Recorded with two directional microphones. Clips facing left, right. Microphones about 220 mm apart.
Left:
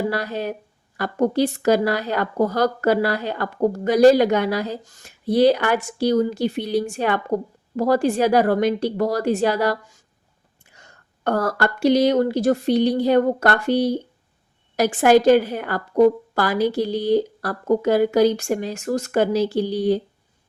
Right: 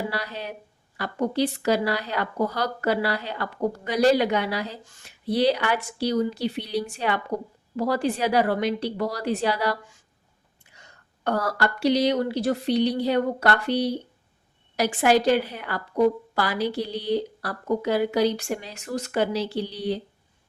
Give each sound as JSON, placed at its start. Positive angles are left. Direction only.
{"t": 0.1, "sound": "a woman's voice", "side_deg": 50}